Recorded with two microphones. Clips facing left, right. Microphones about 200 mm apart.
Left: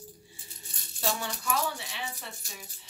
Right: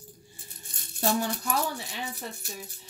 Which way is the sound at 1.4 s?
40° right (ahead or behind).